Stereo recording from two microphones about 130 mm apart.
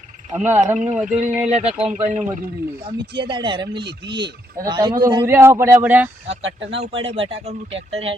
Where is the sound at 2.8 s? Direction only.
40° right (ahead or behind).